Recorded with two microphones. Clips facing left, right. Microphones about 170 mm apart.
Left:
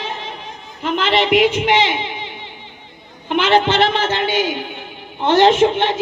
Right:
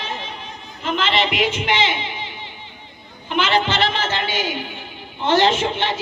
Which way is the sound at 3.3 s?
60° left (ahead or behind).